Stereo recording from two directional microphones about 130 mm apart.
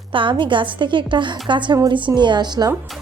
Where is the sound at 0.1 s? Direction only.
40° right (ahead or behind).